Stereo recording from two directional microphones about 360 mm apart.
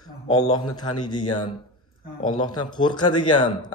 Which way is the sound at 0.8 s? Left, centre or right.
Centre.